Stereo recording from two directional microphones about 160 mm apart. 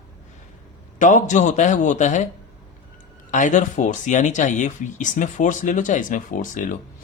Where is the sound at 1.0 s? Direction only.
50° left (ahead or behind).